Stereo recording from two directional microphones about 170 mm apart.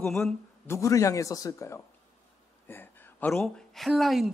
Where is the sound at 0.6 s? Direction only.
20° left (ahead or behind); by 4.3 s centre (ahead or behind).